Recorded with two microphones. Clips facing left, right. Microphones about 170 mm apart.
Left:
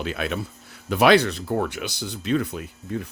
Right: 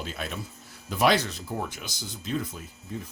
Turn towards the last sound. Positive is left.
turn(degrees=70)  # may be behind; listen again after turning